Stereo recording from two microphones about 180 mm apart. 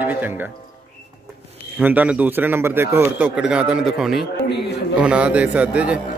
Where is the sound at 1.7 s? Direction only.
10° right (ahead or behind).